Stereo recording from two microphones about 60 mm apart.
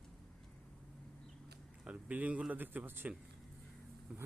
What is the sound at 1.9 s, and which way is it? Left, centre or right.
Speech, right.